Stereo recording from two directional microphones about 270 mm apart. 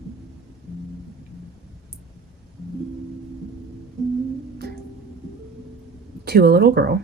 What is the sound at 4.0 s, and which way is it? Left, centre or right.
Music, centre.